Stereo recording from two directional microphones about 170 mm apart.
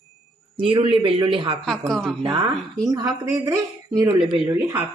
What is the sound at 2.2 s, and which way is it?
Speech, 30° right (ahead or behind).